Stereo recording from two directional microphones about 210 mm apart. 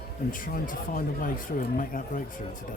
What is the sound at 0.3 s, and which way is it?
Speech, 40° left (ahead or behind).